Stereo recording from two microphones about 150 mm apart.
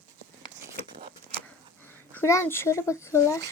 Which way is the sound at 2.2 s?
15° left (ahead or behind).